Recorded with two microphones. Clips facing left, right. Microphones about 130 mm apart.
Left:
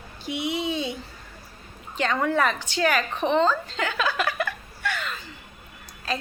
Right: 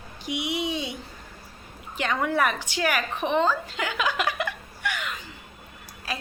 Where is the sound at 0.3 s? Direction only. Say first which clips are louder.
Left 1 dB; 15° right (ahead or behind).